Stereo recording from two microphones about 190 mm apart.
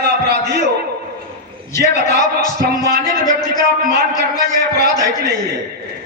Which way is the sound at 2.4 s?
20° left (ahead or behind).